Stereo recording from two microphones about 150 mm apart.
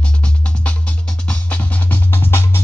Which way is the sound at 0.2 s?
10° left (ahead or behind).